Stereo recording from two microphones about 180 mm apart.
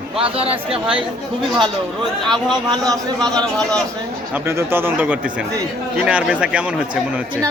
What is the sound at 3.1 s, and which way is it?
Speech, 5° left (ahead or behind).